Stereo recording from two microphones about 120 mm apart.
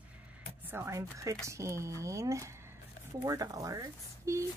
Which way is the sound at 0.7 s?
20° right (ahead or behind).